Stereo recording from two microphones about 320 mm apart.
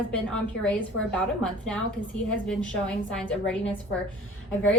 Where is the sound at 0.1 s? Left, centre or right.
Centre.